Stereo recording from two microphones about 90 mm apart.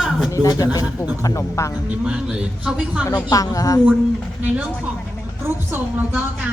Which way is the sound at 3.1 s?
40° left (ahead or behind).